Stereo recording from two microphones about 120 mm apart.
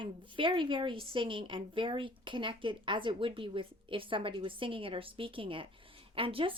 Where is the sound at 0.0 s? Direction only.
45° right (ahead or behind).